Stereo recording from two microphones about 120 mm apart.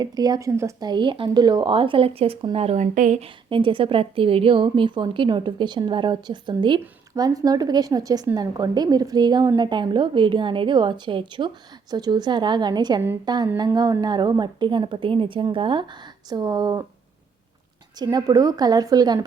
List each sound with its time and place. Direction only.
0.0 s a woman's voice: 35° right (ahead or behind)
0.9 s speech: 40° right (ahead or behind); by 3.2 s 90° right
3.5 s a woman's voice: 45° right (ahead or behind)
18.0 s a woman's voice: 35° right (ahead or behind)